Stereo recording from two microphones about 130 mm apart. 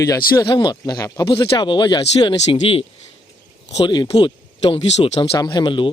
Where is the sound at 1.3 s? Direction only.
40° left (ahead or behind).